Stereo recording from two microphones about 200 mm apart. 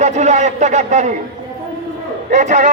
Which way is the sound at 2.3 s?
35° right (ahead or behind).